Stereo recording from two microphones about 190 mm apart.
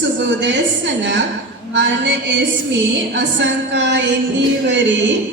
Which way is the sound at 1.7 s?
70° right (ahead or behind).